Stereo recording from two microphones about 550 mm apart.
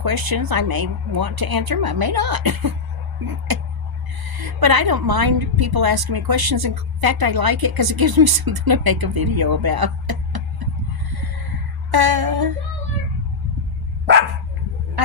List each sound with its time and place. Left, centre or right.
0.0 s a woman's voice: right
11.9 s a woman's voice: right